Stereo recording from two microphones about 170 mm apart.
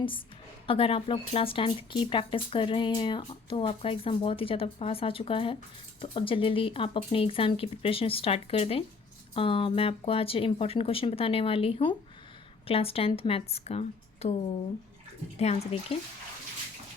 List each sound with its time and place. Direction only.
0.7 s speech: 35° left (ahead or behind)